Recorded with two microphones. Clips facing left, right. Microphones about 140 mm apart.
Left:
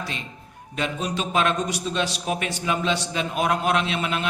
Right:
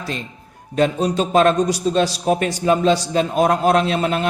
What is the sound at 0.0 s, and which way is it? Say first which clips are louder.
A man's voice: right 5 dB; 40° right (ahead or behind).